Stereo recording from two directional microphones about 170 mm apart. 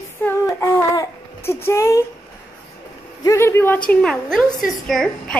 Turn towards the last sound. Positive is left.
turn(degrees=5)  # may be behind; listen again after turning